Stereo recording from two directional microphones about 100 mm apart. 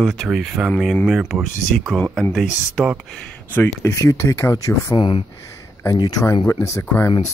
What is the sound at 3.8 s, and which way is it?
Speech, 35° left (ahead or behind).